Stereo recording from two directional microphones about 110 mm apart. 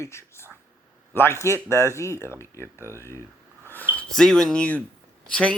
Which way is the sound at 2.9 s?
25° left (ahead or behind).